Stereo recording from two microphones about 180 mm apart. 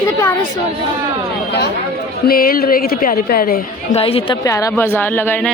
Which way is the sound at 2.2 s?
55° left (ahead or behind).